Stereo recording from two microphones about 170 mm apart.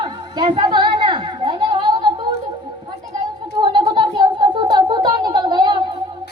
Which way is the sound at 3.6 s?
30° right (ahead or behind).